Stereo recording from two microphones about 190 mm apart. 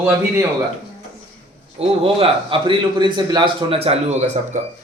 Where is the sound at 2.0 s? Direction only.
30° right (ahead or behind).